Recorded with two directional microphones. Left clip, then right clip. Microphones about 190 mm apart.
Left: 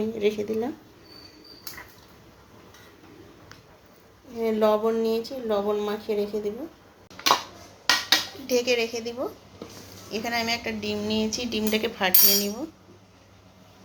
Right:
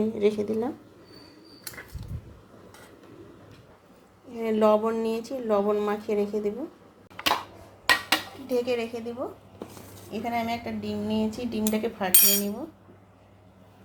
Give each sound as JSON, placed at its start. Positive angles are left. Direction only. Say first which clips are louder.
{"t": 0.0, "sound": "speech", "louder": "right 1 dB", "side_deg": -25}
{"t": 4.4, "sound": "speech", "louder": "even", "side_deg": -35}
{"t": 8.1, "sound": "speech", "louder": "left 3 dB", "side_deg": 0}